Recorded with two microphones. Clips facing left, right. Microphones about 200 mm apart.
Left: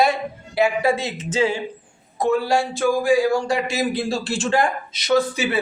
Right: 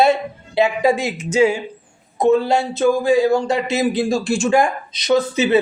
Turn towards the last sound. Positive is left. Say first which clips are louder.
# right 3 dB
turn(degrees=-20)  # may be behind; listen again after turning